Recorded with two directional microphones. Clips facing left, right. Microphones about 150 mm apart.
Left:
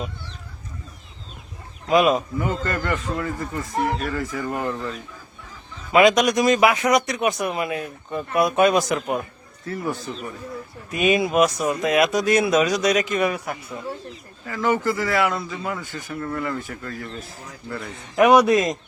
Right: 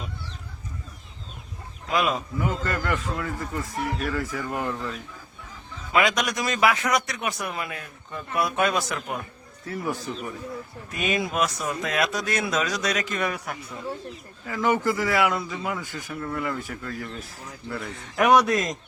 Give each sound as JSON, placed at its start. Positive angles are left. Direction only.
{"t": 1.9, "sound": "speech", "side_deg": 20}
{"t": 2.4, "sound": "a man's voice", "side_deg": 0}
{"t": 5.9, "sound": "speech", "side_deg": 20}
{"t": 9.6, "sound": "speech", "side_deg": -10}
{"t": 10.9, "sound": "speech", "side_deg": 15}
{"t": 14.4, "sound": "speech", "side_deg": -15}
{"t": 17.8, "sound": "speech", "side_deg": 10}